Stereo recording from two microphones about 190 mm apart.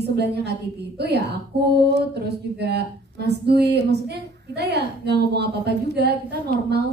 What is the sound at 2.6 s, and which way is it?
A woman's voice, 60° right (ahead or behind).